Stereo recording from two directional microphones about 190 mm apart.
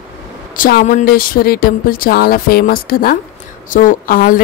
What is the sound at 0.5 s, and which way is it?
Speech, 45° left (ahead or behind).